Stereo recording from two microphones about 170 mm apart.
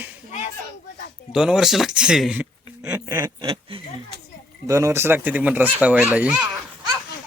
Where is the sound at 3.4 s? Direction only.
30° right (ahead or behind).